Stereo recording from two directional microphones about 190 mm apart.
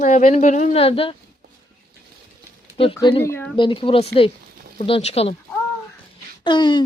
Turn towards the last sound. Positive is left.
turn(degrees=25)  # may be behind; listen again after turning